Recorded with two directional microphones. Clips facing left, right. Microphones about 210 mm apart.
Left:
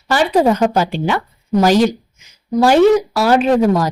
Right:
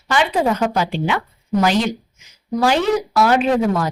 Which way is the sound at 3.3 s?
40° left (ahead or behind).